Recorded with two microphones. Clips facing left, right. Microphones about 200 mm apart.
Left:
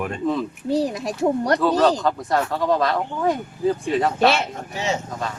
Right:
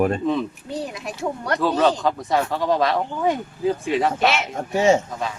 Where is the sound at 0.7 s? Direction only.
35° left (ahead or behind).